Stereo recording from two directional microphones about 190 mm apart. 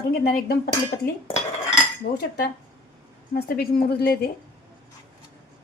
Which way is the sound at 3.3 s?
55° left (ahead or behind).